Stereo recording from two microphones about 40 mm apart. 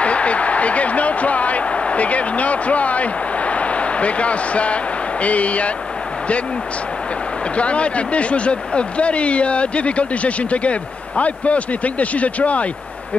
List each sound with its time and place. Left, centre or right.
0.0 s a sound: left
5.2 s speech: left
7.5 s speech: left